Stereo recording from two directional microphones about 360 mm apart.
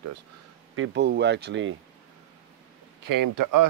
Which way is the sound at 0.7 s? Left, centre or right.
Right.